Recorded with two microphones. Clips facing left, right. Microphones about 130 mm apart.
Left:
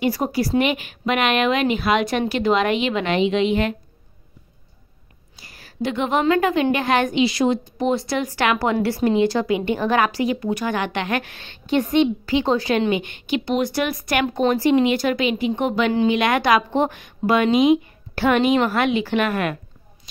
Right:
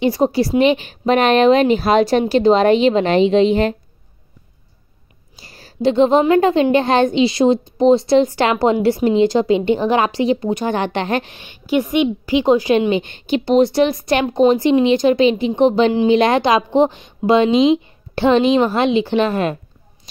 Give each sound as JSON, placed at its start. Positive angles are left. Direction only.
{"t": 0.0, "sound": "a woman's voice", "side_deg": -25}
{"t": 5.3, "sound": "a woman's voice", "side_deg": -30}
{"t": 11.3, "sound": "a woman's voice", "side_deg": -10}
{"t": 12.9, "sound": "a woman's voice", "side_deg": -30}